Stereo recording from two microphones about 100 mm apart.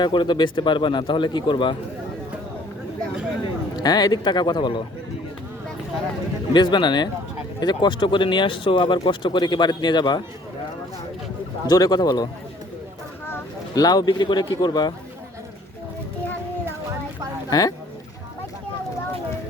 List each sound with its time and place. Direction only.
0.0 s speech: 50° left (ahead or behind)
3.8 s speech: 40° left (ahead or behind)
6.5 s speech: 50° left (ahead or behind)
11.7 s speech: 40° left (ahead or behind)
13.7 s speech: 40° left (ahead or behind)
17.5 s speech: 40° left (ahead or behind)